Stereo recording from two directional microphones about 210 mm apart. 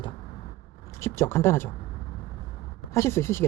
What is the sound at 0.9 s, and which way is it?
Speech, 15° left (ahead or behind).